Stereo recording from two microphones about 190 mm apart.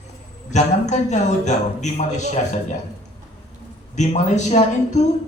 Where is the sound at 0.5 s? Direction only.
40° left (ahead or behind).